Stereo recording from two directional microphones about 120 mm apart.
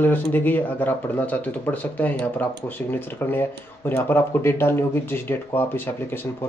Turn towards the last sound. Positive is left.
turn(degrees=20)  # may be behind; listen again after turning